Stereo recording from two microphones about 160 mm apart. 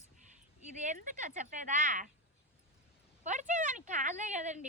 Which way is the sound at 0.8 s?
50° right (ahead or behind).